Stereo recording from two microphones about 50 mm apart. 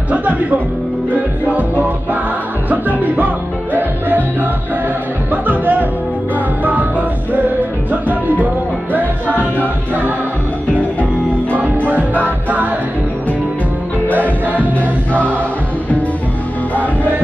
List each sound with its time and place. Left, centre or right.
0.1 s speech: right
3.7 s music: right
11.9 s music: right
14.0 s music: left